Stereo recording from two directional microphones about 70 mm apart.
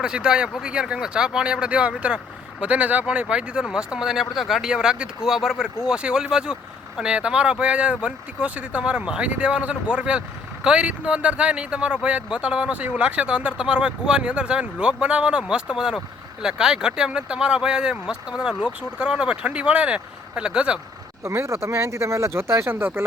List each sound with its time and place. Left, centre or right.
0.0 s speech: centre
21.2 s speech: right